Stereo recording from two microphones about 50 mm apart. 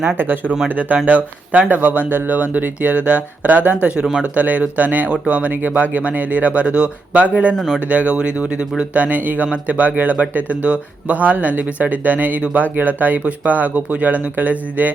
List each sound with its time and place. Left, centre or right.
0.2 s speech: right
5.5 s speech: right
7.5 s speech: centre
7.9 s speech: right